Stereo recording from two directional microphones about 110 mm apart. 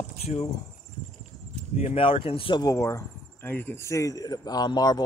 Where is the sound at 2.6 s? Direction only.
30° left (ahead or behind).